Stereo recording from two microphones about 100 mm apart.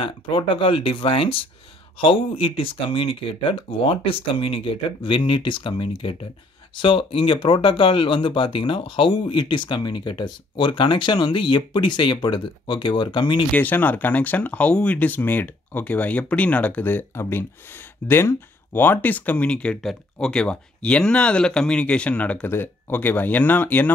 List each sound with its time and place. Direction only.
0.0 s speech: 60° left (ahead or behind)
13.5 s speech: 15° left (ahead or behind)